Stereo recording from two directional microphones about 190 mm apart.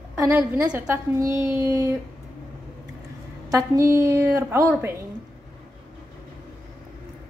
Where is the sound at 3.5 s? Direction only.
15° right (ahead or behind).